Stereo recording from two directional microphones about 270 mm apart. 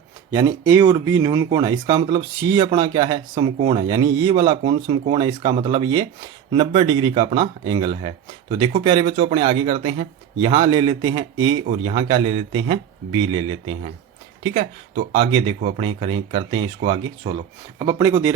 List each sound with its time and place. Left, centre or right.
0.3 s speech: centre